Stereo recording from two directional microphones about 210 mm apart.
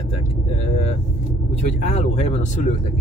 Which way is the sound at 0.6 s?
30° left (ahead or behind).